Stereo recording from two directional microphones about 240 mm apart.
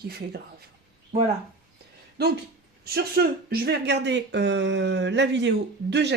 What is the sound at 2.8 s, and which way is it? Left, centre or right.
Speech, right.